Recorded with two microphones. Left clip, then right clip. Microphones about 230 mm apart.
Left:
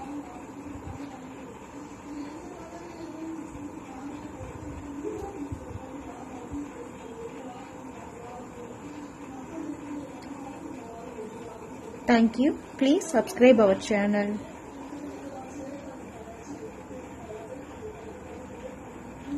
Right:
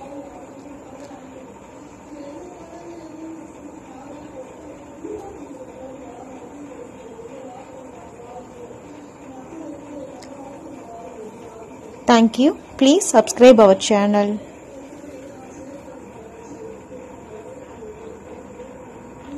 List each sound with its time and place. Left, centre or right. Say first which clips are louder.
12.1 s a woman's voice: right 9 dB; centre